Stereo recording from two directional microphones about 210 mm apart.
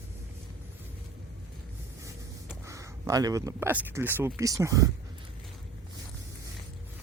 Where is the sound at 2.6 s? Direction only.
15° right (ahead or behind).